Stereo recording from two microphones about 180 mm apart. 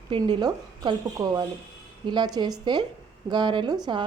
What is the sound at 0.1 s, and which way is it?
A woman's voice, 25° right (ahead or behind).